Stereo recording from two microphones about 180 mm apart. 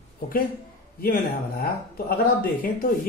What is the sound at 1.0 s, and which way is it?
A man's voice, 55° left (ahead or behind).